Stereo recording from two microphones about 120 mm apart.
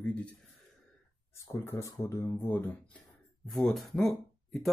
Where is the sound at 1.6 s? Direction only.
25° left (ahead or behind).